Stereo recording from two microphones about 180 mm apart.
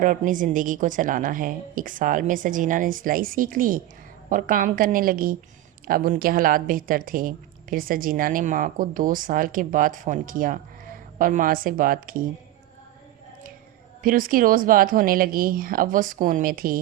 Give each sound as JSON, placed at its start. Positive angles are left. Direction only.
{"t": 0.0, "sound": "speech", "side_deg": -45}
{"t": 14.0, "sound": "speech", "side_deg": -50}